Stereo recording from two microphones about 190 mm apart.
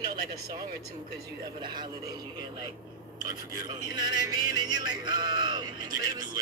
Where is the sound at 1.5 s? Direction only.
25° right (ahead or behind).